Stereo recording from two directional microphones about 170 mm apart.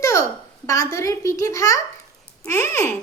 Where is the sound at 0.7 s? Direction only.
20° left (ahead or behind).